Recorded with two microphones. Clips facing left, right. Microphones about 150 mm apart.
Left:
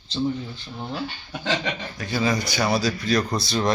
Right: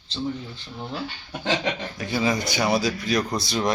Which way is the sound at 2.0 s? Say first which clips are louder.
Left 1 dB; 20° right (ahead or behind).